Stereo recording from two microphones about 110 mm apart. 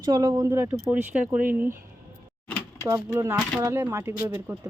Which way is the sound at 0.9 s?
15° right (ahead or behind).